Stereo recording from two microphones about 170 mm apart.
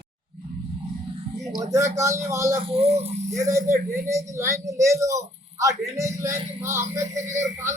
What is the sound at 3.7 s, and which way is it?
Speech, 15° right (ahead or behind).